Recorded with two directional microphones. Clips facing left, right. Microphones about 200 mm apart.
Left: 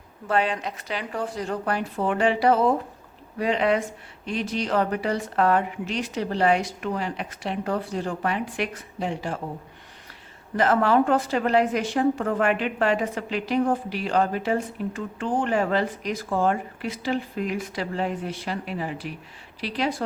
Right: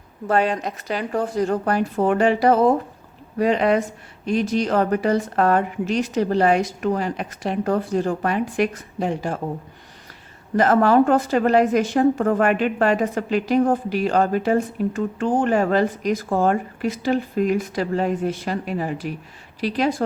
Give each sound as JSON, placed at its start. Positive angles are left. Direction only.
{"t": 0.3, "sound": "a woman's voice", "side_deg": -45}
{"t": 10.6, "sound": "a woman's voice", "side_deg": -45}